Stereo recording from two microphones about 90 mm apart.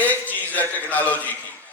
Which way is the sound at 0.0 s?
20° left (ahead or behind).